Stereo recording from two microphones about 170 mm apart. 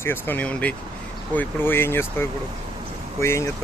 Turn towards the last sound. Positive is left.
turn(degrees=15)  # may be behind; listen again after turning